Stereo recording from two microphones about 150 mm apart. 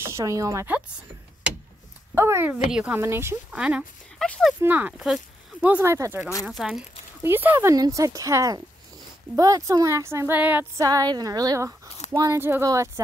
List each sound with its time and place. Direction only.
0.0 s speech: 20° right (ahead or behind)
2.1 s speech: 15° right (ahead or behind); by 4.6 s centre (ahead or behind)
4.6 s speech: 10° right (ahead or behind)
6.4 s speech: 5° right (ahead or behind)
7.2 s speech: 15° right (ahead or behind)
10.8 s speech: 25° right (ahead or behind)